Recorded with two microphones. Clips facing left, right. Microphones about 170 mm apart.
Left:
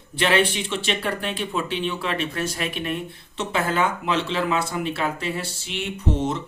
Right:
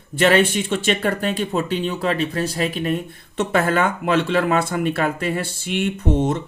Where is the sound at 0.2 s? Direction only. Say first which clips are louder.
Right 5 dB; 45° right (ahead or behind).